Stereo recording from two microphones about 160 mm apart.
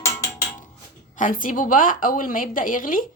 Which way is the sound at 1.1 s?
55° left (ahead or behind).